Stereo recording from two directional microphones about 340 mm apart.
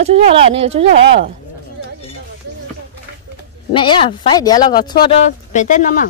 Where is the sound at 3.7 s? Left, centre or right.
Centre.